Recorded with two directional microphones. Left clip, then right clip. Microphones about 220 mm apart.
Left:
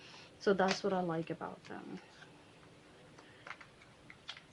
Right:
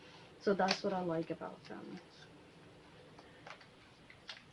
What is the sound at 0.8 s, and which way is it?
Speech, 40° left (ahead or behind).